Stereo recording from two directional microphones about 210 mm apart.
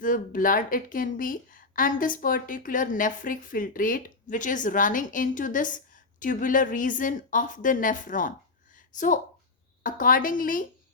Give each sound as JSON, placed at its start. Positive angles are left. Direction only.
{"t": 0.0, "sound": "a woman's voice", "side_deg": 40}
{"t": 9.8, "sound": "a woman's voice", "side_deg": 40}